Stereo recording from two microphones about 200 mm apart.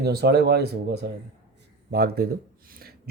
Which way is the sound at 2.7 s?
50° right (ahead or behind).